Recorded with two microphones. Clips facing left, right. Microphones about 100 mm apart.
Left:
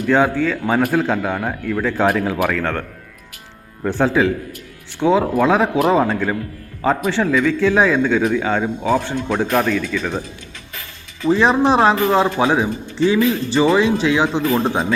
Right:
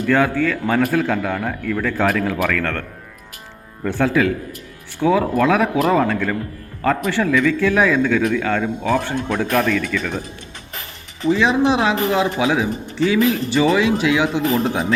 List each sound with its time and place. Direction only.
0.0 s a man's voice: 25° left (ahead or behind)
3.8 s a man's voice: 30° left (ahead or behind)
11.3 s speech: 40° left (ahead or behind)